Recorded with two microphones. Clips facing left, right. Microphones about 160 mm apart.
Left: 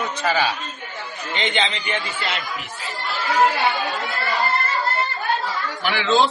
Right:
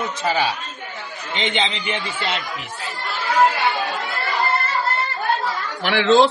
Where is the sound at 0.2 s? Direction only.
20° right (ahead or behind).